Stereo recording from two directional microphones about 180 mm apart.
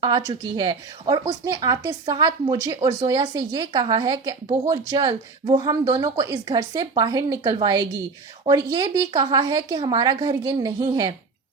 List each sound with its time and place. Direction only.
0.0 s a woman's voice: 25° right (ahead or behind)